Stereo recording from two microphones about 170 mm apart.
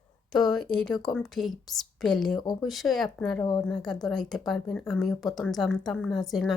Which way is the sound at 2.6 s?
Centre (ahead or behind).